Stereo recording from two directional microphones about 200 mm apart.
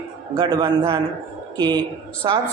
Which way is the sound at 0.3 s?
25° right (ahead or behind).